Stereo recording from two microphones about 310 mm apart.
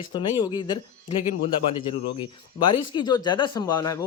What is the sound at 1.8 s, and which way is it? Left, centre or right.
Speech, centre.